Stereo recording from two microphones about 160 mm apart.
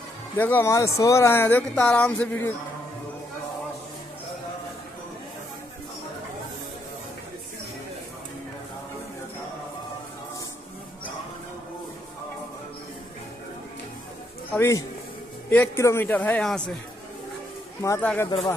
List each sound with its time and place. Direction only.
0.4 s a man's voice: 15° left (ahead or behind)
14.5 s a man's voice: 15° left (ahead or behind)
18.0 s a man's voice: 10° left (ahead or behind)